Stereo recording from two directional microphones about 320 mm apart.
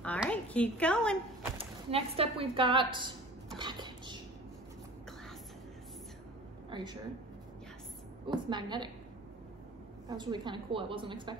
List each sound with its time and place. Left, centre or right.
0.0 s speech: centre
1.6 s speech: centre
3.5 s a sound: centre
6.7 s speech: centre
8.3 s a woman's voice: centre
10.0 s a woman's voice: centre